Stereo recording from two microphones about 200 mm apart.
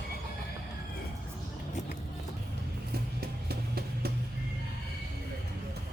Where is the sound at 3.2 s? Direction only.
50° right (ahead or behind).